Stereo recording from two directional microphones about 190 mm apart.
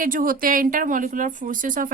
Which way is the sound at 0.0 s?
45° right (ahead or behind).